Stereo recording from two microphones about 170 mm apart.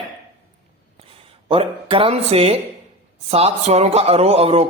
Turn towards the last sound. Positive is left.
turn(degrees=-35)  # may be behind; listen again after turning